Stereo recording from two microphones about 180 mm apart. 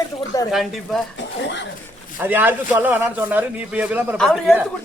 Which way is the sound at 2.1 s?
10° right (ahead or behind).